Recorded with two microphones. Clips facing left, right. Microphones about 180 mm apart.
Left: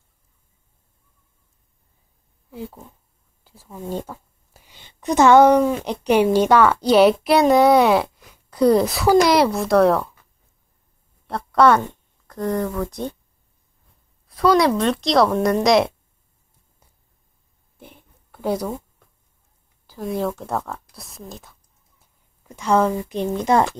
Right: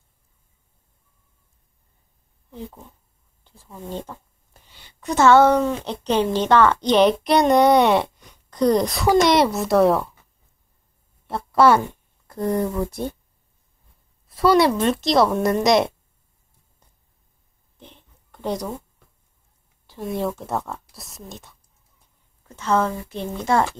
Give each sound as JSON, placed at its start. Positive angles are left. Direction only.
{"t": 2.5, "sound": "speech", "side_deg": 5}
{"t": 3.4, "sound": "whispering", "side_deg": 5}
{"t": 4.7, "sound": "a woman's voice", "side_deg": 20}
{"t": 11.2, "sound": "speech", "side_deg": -5}
{"t": 14.4, "sound": "a woman's voice", "side_deg": -5}
{"t": 17.7, "sound": "a sound", "side_deg": 10}
{"t": 19.9, "sound": "a woman's voice", "side_deg": 0}
{"t": 22.4, "sound": "speech", "side_deg": 15}